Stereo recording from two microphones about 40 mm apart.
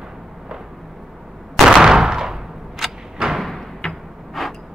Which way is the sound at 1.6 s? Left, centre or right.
Centre.